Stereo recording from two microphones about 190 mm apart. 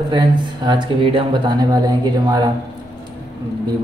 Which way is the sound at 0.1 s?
25° right (ahead or behind).